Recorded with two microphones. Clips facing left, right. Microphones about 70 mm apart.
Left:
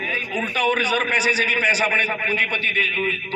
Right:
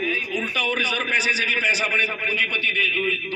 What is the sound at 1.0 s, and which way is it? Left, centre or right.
A man's voice, left.